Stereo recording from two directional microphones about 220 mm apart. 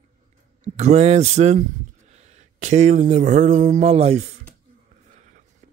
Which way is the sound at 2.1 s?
30° right (ahead or behind).